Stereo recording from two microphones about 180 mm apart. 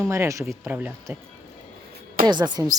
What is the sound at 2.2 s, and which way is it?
Speech, 25° right (ahead or behind).